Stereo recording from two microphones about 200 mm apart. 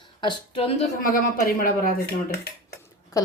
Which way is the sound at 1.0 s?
45° left (ahead or behind).